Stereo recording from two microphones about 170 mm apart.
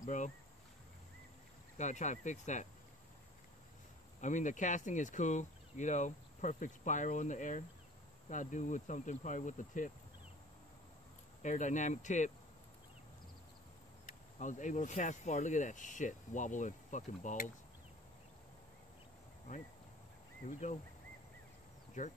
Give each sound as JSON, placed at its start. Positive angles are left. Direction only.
{"t": 0.0, "sound": "speech", "side_deg": 45}
{"t": 1.8, "sound": "speech", "side_deg": 45}
{"t": 4.2, "sound": "speech", "side_deg": 45}
{"t": 11.4, "sound": "speech", "side_deg": 45}
{"t": 14.0, "sound": "speech", "side_deg": 45}
{"t": 20.4, "sound": "speech", "side_deg": 40}
{"t": 22.0, "sound": "speech", "side_deg": 50}